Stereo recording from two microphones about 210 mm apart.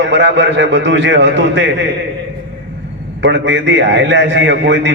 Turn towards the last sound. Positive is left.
turn(degrees=-60)  # may be behind; listen again after turning